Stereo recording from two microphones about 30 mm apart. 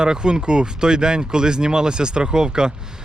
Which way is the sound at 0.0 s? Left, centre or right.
Right.